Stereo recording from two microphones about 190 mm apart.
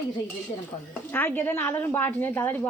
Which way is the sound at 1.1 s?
10° left (ahead or behind).